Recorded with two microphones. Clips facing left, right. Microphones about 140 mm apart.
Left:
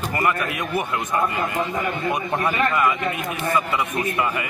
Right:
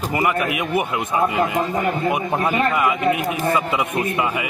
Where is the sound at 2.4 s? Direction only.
20° right (ahead or behind).